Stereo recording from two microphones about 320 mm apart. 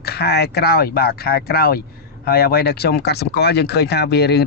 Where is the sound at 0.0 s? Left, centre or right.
Left.